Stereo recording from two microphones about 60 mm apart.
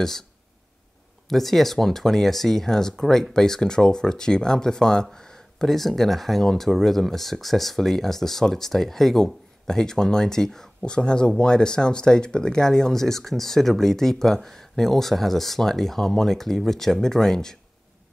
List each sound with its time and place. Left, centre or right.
1.3 s speech: centre